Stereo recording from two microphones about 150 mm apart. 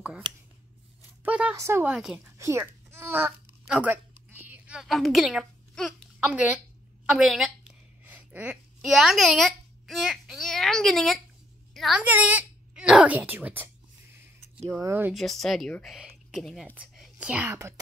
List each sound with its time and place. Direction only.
1.2 s a sound: 10° right (ahead or behind)
1.5 s speech: 20° right (ahead or behind)
2.0 s speech: 5° right (ahead or behind)
2.2 s speech: 20° right (ahead or behind)
3.6 s a sound: 10° right (ahead or behind)
12.0 s speech: 10° right (ahead or behind)
14.7 s speech: 15° right (ahead or behind)
15.1 s a woman's voice: centre (ahead or behind)